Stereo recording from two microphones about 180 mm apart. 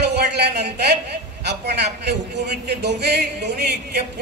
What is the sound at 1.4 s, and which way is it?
A man's voice, 70° right (ahead or behind).